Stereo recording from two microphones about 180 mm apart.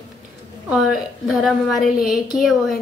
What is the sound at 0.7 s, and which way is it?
A woman's voice, centre (ahead or behind).